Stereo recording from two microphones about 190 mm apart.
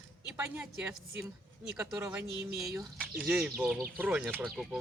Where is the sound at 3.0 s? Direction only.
5° right (ahead or behind).